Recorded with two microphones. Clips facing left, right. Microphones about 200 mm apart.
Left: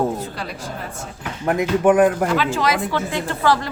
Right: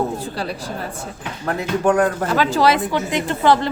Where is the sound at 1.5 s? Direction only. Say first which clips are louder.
Left 3 dB; 15° left (ahead or behind).